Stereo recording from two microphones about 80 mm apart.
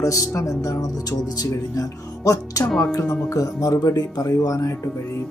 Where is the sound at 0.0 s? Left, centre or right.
Left.